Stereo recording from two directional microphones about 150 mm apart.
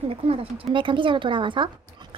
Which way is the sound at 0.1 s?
40° right (ahead or behind).